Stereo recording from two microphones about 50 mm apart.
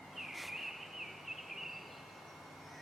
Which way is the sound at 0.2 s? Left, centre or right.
Centre.